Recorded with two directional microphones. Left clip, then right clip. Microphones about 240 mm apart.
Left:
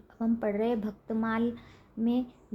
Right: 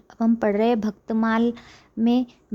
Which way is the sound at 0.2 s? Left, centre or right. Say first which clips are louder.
Right 9 dB; right.